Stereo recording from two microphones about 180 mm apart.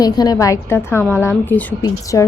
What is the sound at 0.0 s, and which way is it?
A woman's voice, 20° left (ahead or behind).